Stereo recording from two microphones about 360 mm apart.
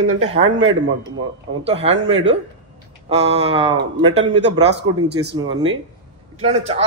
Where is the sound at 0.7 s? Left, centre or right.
Right.